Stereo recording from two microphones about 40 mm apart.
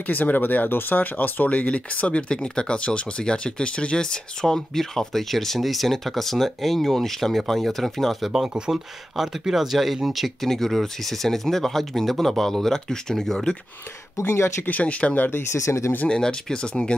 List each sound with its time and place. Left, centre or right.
0.0 s speech: left; by 8.3 s centre
9.5 s speech: centre
14.2 s speech: left
14.7 s speech: left
15.7 s speech: left
16.1 s speech: centre